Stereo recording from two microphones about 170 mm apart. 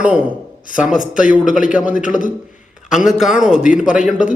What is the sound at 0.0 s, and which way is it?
Speech, 10° right (ahead or behind).